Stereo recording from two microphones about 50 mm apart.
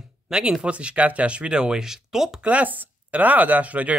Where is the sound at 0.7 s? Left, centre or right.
Right; by 2.4 s centre.